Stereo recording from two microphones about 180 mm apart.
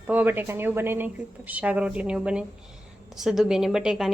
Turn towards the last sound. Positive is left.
turn(degrees=0)  # may be behind; listen again after turning